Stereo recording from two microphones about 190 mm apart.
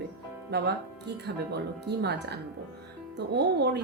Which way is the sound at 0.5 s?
60° right (ahead or behind).